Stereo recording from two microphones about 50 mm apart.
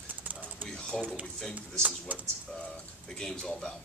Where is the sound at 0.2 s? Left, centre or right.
Right.